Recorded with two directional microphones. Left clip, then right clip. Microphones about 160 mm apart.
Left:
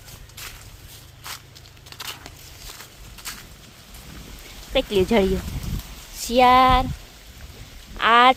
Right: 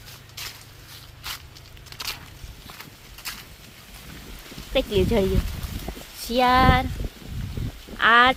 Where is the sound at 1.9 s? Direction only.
15° left (ahead or behind).